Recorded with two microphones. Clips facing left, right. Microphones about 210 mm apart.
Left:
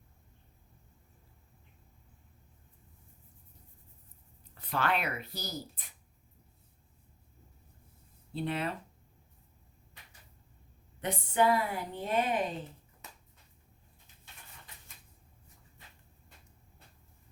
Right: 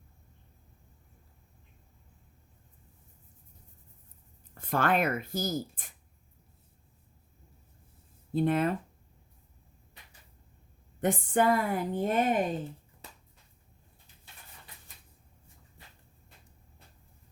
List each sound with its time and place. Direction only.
4.5 s speech: 50° right (ahead or behind)
8.3 s speech: 50° right (ahead or behind)
11.0 s speech: 50° right (ahead or behind)